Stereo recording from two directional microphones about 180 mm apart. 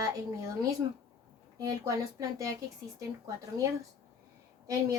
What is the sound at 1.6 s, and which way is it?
Speech, 20° right (ahead or behind).